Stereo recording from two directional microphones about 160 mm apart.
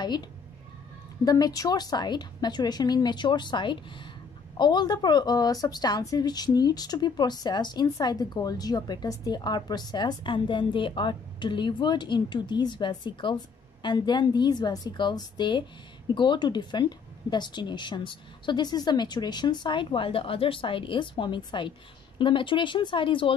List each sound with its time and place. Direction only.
1.2 s a woman's voice: 25° left (ahead or behind)